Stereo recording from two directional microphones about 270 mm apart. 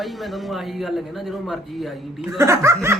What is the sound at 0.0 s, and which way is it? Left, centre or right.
Speech, centre.